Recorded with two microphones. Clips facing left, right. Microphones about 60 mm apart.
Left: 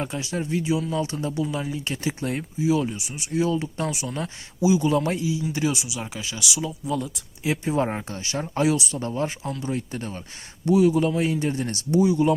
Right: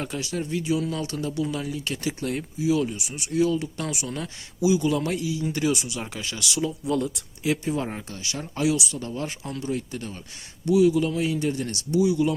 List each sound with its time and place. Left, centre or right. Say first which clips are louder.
0.0 s speech: left 1 dB; left
0.8 s speech: left 2 dB; centre
1.0 s speech: left 1 dB; left; by 7.3 s centre
7.4 s speech: left 2 dB; left